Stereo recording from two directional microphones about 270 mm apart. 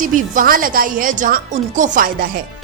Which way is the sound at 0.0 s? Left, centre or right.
Right.